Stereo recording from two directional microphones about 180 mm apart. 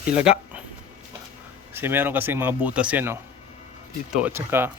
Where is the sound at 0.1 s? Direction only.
5° right (ahead or behind).